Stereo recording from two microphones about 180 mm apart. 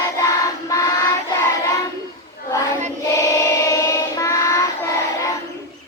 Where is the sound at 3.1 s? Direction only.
15° left (ahead or behind).